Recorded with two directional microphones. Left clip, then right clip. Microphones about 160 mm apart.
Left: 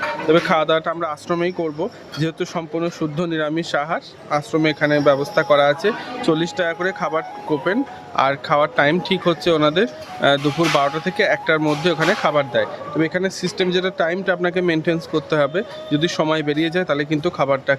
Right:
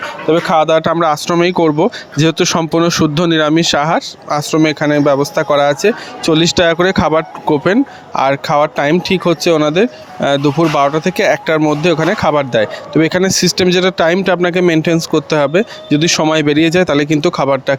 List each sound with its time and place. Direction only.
0.3 s speech: 30° right (ahead or behind)
0.8 s speech: 55° right (ahead or behind)